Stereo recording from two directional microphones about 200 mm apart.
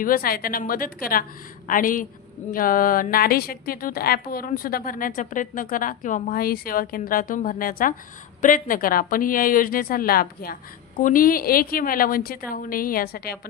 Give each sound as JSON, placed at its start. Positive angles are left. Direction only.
{"t": 0.0, "sound": "a woman's voice", "side_deg": 45}